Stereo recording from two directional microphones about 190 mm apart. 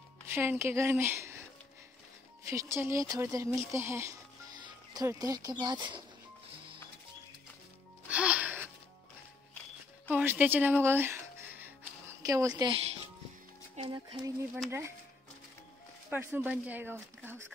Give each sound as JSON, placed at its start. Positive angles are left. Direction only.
{"t": 0.3, "sound": "speech", "side_deg": -10}
{"t": 2.5, "sound": "speech", "side_deg": -15}
{"t": 8.1, "sound": "music", "side_deg": -5}
{"t": 10.0, "sound": "speech", "side_deg": -10}
{"t": 13.7, "sound": "speech", "side_deg": -25}
{"t": 14.5, "sound": "speech", "side_deg": -10}
{"t": 16.1, "sound": "speech", "side_deg": -10}